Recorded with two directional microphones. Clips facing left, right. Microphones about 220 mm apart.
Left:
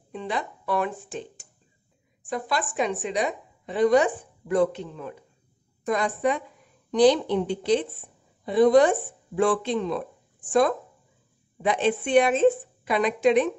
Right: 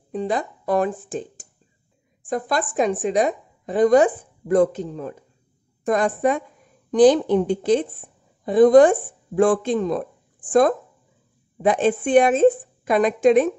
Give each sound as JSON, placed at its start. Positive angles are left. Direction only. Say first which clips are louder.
{"t": 0.1, "sound": "a woman's voice", "louder": "right 6 dB", "side_deg": -40}